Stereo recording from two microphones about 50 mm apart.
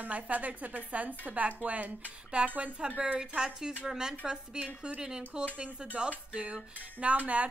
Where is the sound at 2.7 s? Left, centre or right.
Centre.